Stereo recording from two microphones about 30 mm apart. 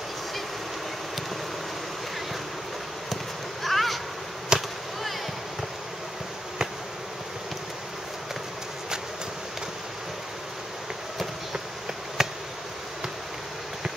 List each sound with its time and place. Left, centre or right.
3.6 s boat: centre
4.5 s a sound: right
12.2 s insect: centre